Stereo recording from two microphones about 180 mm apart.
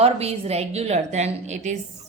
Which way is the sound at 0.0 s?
35° right (ahead or behind).